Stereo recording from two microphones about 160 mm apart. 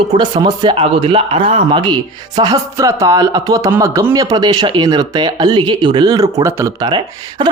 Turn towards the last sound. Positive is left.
turn(degrees=-25)  # may be behind; listen again after turning